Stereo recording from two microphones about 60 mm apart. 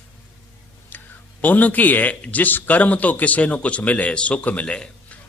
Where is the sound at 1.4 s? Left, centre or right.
Left.